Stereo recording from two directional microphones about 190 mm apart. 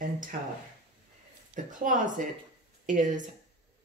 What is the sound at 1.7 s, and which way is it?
Speech, 40° right (ahead or behind).